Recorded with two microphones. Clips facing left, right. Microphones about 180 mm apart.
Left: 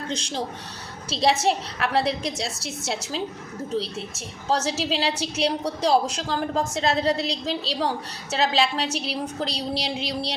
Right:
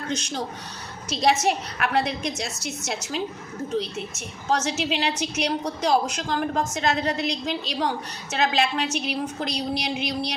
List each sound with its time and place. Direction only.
0.1 s a woman's voice: 30° left (ahead or behind)